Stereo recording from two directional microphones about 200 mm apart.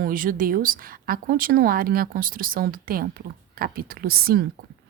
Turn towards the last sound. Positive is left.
turn(degrees=-50)  # may be behind; listen again after turning